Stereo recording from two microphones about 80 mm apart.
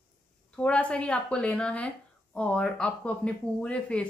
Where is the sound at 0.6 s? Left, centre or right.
Centre.